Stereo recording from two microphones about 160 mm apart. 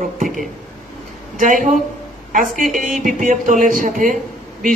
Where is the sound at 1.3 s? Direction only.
50° right (ahead or behind).